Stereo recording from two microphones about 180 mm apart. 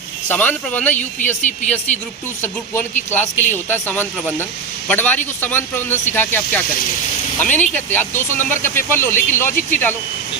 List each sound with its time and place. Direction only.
0.3 s speech: 10° left (ahead or behind)
0.9 s speech: 40° left (ahead or behind)
2.4 s speech: 10° left (ahead or behind)
9.5 s speech: 50° left (ahead or behind)